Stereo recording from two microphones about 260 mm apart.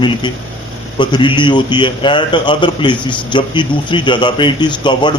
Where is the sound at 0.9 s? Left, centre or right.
Centre.